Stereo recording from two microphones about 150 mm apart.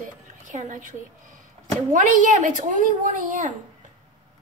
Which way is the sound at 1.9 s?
60° right (ahead or behind).